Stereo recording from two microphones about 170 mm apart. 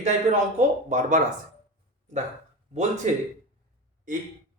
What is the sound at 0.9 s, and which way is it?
Speech, 45° right (ahead or behind).